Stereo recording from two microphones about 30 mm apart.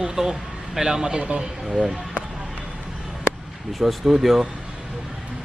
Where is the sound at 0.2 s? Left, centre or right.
Centre.